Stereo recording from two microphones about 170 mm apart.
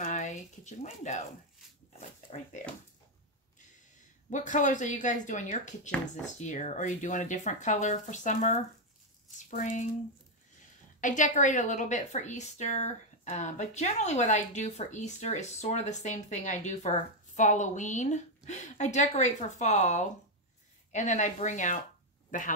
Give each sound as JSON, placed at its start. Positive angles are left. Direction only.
{"t": 0.0, "sound": "a sound", "side_deg": 45}
{"t": 2.0, "sound": "speech", "side_deg": 45}
{"t": 4.3, "sound": "a woman's voice", "side_deg": 45}
{"t": 11.0, "sound": "a woman's voice", "side_deg": 50}